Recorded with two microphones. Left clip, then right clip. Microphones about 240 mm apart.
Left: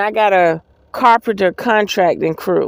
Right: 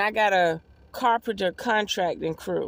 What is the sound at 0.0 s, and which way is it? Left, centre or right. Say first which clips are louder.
Speech: left 9 dB; centre.